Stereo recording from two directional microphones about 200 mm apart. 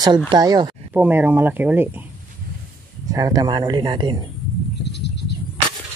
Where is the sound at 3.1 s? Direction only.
15° right (ahead or behind).